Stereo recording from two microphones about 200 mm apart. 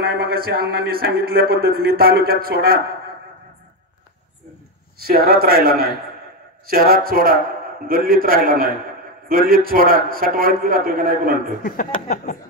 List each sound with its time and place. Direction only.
0.0 s speech: 50° right (ahead or behind)
4.9 s speech: 50° right (ahead or behind)
11.6 s speech: 40° left (ahead or behind)